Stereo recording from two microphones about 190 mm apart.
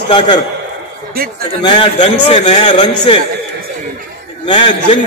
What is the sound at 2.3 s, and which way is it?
Music, 30° left (ahead or behind).